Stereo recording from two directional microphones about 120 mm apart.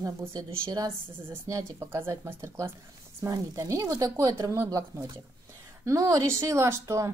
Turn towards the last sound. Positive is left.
turn(degrees=-25)  # may be behind; listen again after turning